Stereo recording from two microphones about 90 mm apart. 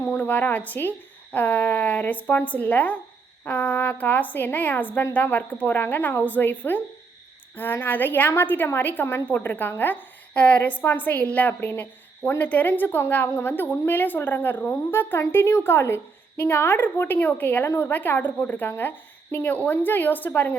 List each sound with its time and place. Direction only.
0.0 s a woman's voice: 25° left (ahead or behind)